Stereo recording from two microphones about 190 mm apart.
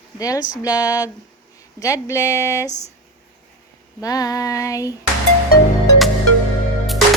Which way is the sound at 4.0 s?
20° left (ahead or behind).